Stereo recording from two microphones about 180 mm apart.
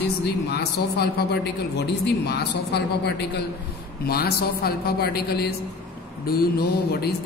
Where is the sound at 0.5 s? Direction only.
65° left (ahead or behind).